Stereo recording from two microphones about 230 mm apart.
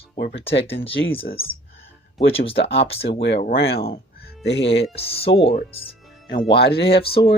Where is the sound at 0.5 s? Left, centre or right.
Left.